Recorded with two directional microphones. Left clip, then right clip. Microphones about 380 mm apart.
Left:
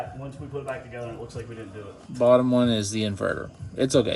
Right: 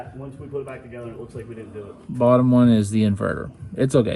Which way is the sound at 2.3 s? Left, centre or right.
Centre.